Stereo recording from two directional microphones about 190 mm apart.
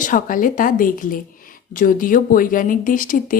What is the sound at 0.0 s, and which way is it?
Speech, 45° left (ahead or behind).